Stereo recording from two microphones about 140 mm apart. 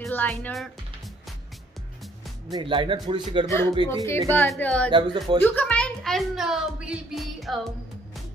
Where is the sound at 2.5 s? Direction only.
35° right (ahead or behind).